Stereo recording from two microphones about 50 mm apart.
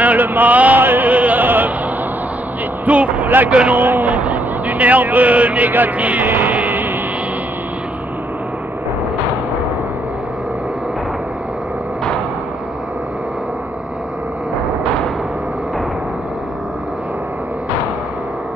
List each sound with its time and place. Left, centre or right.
0.0 s chant: right
0.8 s music: right
2.8 s vehicle: right
3.7 s a man's voice: right